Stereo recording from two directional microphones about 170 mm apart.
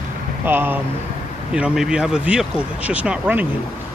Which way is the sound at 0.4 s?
10° right (ahead or behind).